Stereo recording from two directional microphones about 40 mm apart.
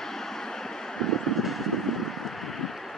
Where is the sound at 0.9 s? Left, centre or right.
Centre.